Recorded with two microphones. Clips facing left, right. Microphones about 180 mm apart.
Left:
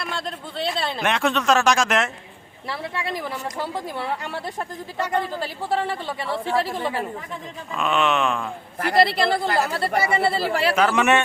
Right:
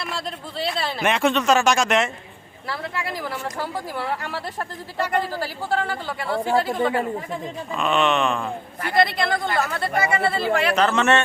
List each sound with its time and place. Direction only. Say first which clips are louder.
0.0 s speech: even; centre (ahead or behind)
2.6 s speech: even; 25° left (ahead or behind)
6.5 s a woman's voice: right 2 dB; 25° right (ahead or behind)
7.8 s speech: right 1 dB; 5° left (ahead or behind)
9.0 s speech: left 1 dB; 30° left (ahead or behind)
10.8 s speech: left 2 dB; 10° left (ahead or behind)